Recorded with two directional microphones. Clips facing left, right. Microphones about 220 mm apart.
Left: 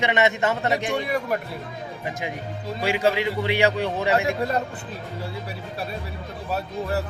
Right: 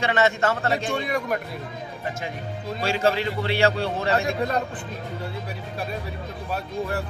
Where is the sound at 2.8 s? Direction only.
15° left (ahead or behind).